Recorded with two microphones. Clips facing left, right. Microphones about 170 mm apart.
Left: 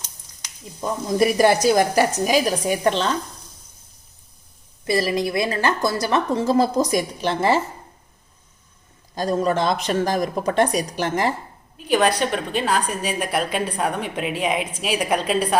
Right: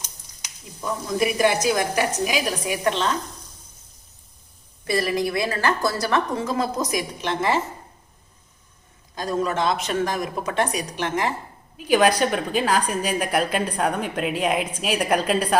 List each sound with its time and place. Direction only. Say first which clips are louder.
0.8 s speech: left 4 dB; 35° left (ahead or behind)
4.9 s a woman's voice: left 2 dB; 25° left (ahead or behind)
9.1 s speech: left 3 dB; 35° left (ahead or behind)
11.9 s a woman's voice: right 1 dB; 5° right (ahead or behind)